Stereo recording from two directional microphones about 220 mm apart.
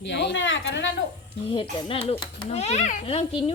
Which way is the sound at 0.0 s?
50° left (ahead or behind).